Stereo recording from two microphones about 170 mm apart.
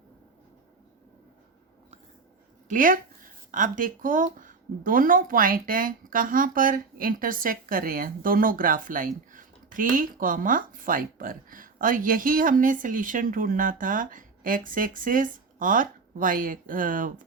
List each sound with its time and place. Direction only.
2.6 s speech: 50° right (ahead or behind)